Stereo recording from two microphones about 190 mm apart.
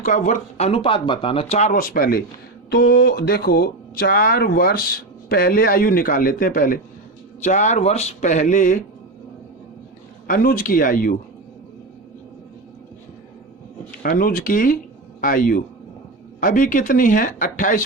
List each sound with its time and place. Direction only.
0.0 s speech: 40° left (ahead or behind)
10.2 s speech: 45° left (ahead or behind)
14.0 s speech: 50° left (ahead or behind)